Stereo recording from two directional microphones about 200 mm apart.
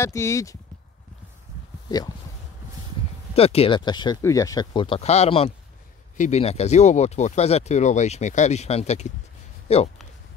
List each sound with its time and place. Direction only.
0.0 s speech: 15° left (ahead or behind)
3.3 s speech: 30° left (ahead or behind)